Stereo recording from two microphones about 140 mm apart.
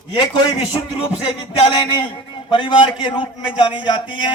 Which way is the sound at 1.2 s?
35° left (ahead or behind).